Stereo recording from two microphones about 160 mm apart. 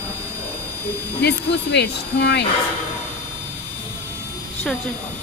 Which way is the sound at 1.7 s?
90° left.